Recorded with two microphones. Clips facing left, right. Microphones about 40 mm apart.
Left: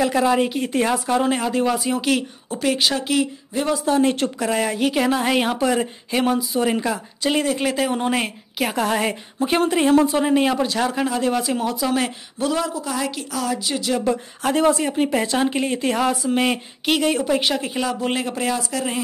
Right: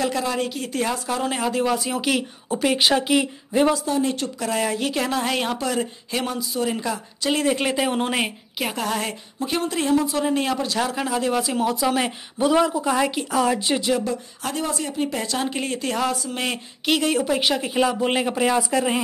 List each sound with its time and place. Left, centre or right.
0.0 s speech: centre
1.3 s speech: centre
3.8 s speech: left
4.4 s speech: centre
7.6 s speech: centre
8.5 s speech: centre
8.8 s speech: centre
10.7 s speech: centre; by 13.8 s right
14.0 s speech: left
14.9 s speech: left; by 18.9 s centre